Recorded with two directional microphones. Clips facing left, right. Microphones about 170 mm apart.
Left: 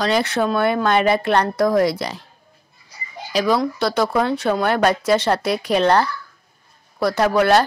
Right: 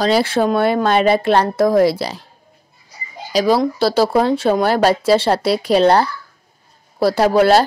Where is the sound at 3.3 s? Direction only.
35° right (ahead or behind).